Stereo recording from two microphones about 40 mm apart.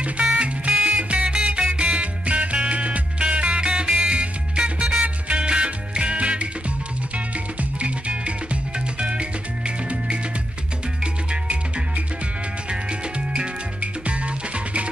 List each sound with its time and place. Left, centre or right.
0.0 s music: right
9.0 s music: right
13.7 s music: right